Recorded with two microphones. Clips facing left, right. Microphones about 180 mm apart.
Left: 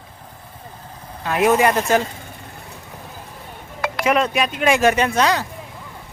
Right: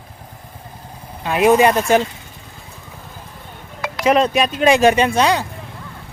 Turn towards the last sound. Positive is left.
turn(degrees=-25)  # may be behind; listen again after turning